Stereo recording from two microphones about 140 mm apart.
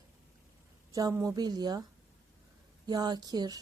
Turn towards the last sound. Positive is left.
turn(degrees=-30)  # may be behind; listen again after turning